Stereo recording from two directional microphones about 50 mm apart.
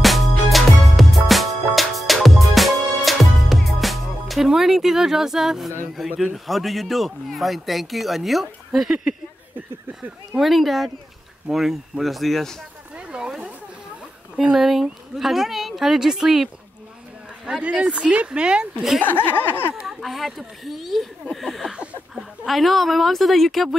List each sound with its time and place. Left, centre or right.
0.0 s music: centre
4.5 s speech: centre
6.0 s speech: centre
6.3 s speech: centre
10.4 s speech: centre
11.5 s speech: centre
12.0 s speech: centre
12.9 s a sound: right
14.5 s speech: centre
17.5 s speech: centre
19.0 s speech: left
19.7 s speech: centre